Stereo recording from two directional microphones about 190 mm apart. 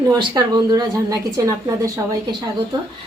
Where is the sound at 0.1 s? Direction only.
25° right (ahead or behind).